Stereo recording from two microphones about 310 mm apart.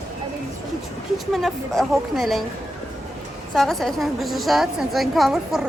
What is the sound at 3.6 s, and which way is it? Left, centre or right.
A woman's voice, centre.